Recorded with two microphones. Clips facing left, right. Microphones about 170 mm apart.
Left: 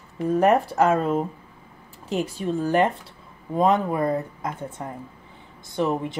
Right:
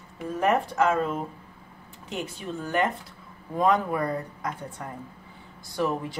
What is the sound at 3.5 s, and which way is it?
Speech, 25° left (ahead or behind).